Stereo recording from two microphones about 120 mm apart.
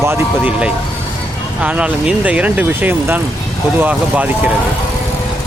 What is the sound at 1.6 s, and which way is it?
A man's voice, 10° right (ahead or behind).